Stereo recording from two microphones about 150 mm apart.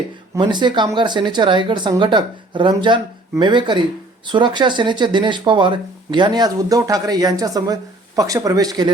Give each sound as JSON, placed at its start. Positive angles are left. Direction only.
{"t": 0.3, "sound": "speech", "side_deg": -30}